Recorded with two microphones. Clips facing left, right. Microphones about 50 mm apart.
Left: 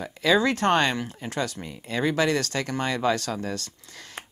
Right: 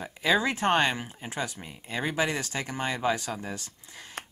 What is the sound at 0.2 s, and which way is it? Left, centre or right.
Speech, centre.